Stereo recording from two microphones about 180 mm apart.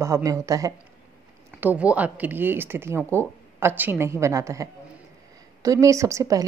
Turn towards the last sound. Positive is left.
turn(degrees=-15)  # may be behind; listen again after turning